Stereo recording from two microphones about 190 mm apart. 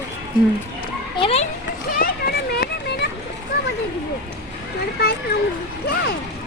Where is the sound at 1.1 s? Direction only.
30° left (ahead or behind).